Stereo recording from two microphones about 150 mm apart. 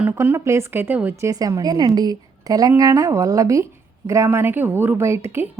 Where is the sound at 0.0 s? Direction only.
15° right (ahead or behind).